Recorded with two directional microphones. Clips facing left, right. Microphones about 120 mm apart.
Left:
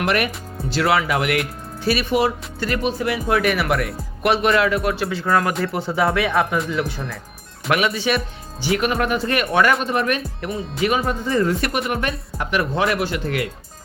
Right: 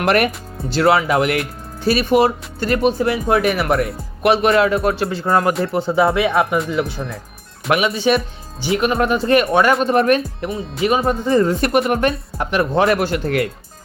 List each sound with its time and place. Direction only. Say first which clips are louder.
0.0 s speech: right 5 dB; 50° right (ahead or behind)
0.7 s speech: right 4 dB; 30° right (ahead or behind)
7.7 s speech: right 4 dB; 25° right (ahead or behind); by 13.5 s 45° right (ahead or behind)